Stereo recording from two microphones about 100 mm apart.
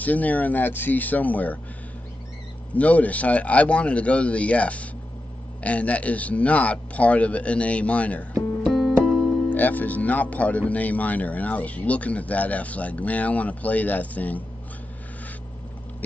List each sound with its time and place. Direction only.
0.0 s speech: 15° left (ahead or behind)
2.7 s speech: 15° left (ahead or behind)
8.6 s music: 5° left (ahead or behind)
9.5 s speech: 15° left (ahead or behind)